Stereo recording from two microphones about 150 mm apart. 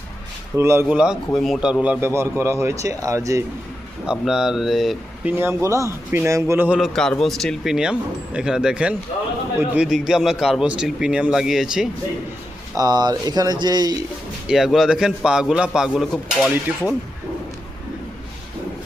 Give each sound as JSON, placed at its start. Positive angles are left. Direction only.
{"t": 0.5, "sound": "a man's voice", "side_deg": -20}
{"t": 4.0, "sound": "speech", "side_deg": -5}
{"t": 5.3, "sound": "a man's voice", "side_deg": -15}
{"t": 6.7, "sound": "a man's voice", "side_deg": 0}
{"t": 12.7, "sound": "speech", "side_deg": -25}
{"t": 14.4, "sound": "a man's voice", "side_deg": -5}